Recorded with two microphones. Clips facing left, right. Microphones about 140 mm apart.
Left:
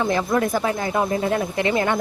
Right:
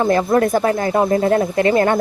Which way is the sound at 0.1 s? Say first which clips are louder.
Right 6 dB; 50° right (ahead or behind).